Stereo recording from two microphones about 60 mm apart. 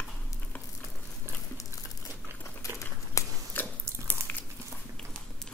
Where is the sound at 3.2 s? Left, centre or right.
Left.